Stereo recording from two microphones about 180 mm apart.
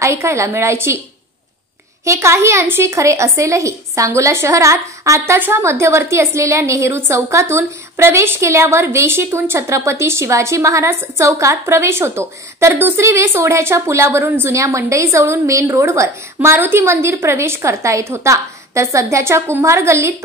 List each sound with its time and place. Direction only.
0.0 s a woman's voice: 15° right (ahead or behind)
2.0 s a woman's voice: 15° right (ahead or behind)